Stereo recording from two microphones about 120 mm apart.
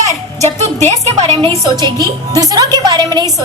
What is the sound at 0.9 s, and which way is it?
Speech, 65° right (ahead or behind).